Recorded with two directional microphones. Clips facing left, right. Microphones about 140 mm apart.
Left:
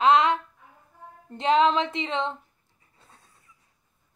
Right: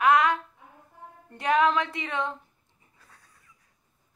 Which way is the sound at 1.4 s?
25° left (ahead or behind).